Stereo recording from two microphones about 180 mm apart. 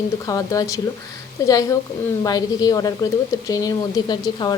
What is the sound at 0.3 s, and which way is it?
A woman's voice, 20° left (ahead or behind).